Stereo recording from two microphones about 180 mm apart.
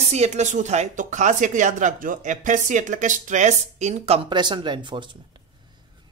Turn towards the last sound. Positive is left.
turn(degrees=-25)  # may be behind; listen again after turning